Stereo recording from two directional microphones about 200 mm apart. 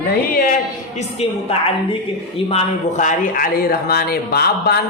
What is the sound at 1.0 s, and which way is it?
A woman's voice, 30° left (ahead or behind).